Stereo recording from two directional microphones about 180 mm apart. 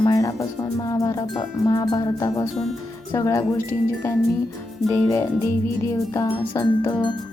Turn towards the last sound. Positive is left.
turn(degrees=20)  # may be behind; listen again after turning